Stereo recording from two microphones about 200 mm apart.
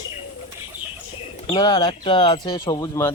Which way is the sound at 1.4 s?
20° left (ahead or behind).